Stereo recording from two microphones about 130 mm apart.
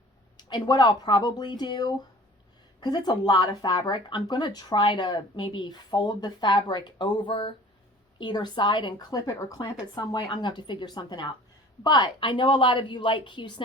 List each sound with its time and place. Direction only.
0.3 s speech: 35° left (ahead or behind)